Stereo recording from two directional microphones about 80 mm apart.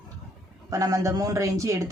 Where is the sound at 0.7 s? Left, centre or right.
Right.